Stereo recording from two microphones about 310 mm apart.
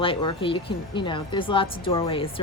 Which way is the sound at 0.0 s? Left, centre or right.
Centre.